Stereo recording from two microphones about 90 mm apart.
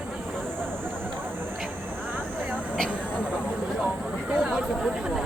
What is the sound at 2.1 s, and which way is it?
Vehicle, 20° right (ahead or behind).